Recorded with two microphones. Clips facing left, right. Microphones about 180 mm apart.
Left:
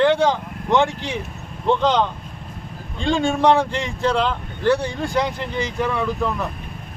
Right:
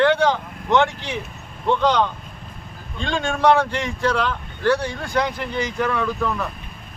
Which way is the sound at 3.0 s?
10° left (ahead or behind).